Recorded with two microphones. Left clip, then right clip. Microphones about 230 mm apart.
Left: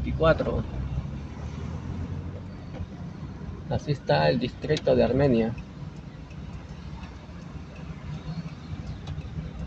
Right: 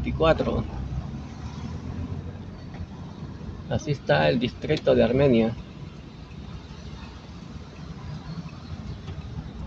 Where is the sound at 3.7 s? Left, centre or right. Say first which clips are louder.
Right 2 dB; centre.